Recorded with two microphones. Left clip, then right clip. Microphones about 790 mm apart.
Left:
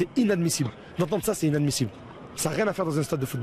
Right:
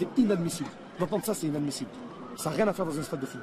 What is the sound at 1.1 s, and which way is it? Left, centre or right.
Speech, left.